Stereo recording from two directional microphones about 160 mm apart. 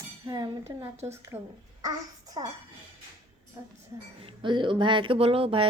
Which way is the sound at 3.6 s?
25° right (ahead or behind).